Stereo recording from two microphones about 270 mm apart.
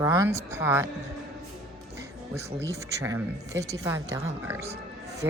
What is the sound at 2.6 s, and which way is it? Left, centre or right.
Speech, centre.